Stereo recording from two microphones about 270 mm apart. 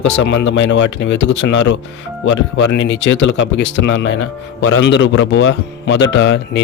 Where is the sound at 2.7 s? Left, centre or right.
Left.